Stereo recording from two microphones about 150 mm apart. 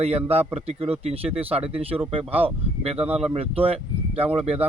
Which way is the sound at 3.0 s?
10° right (ahead or behind).